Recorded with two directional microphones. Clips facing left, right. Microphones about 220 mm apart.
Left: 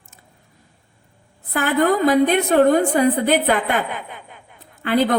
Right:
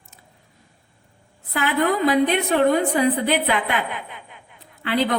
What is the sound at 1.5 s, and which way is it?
A woman's voice, 45° left (ahead or behind).